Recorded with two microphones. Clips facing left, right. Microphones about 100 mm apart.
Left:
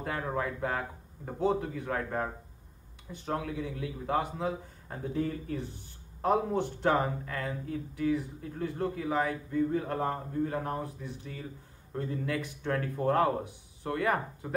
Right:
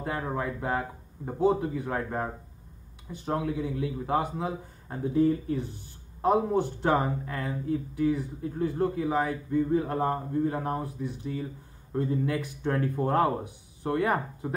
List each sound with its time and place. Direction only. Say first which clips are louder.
0.0 s speech: right 2 dB; 15° right (ahead or behind)
3.4 s speech: right 6 dB; 25° right (ahead or behind)